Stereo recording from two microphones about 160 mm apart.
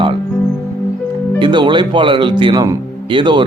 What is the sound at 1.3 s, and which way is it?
Speech, 30° right (ahead or behind).